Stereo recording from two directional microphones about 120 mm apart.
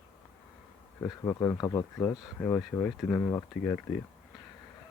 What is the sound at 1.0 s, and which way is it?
Speech, 25° left (ahead or behind).